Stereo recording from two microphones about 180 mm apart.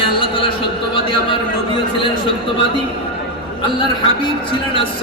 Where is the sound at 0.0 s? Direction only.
30° left (ahead or behind).